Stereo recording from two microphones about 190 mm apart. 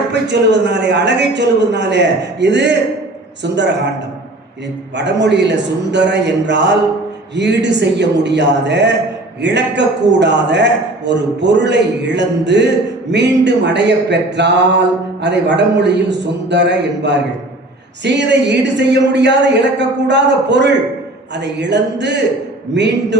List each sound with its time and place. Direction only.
0.1 s a man's voice: 65° right (ahead or behind)
4.9 s a man's voice: 65° right (ahead or behind)